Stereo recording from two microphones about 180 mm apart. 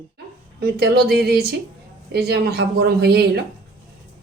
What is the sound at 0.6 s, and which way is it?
A woman's voice, 60° right (ahead or behind).